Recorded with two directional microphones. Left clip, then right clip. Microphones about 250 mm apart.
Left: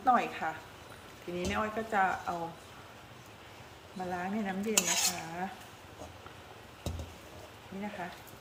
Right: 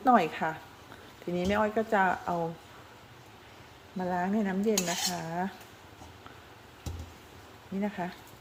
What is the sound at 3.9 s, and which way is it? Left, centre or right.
Speech, right.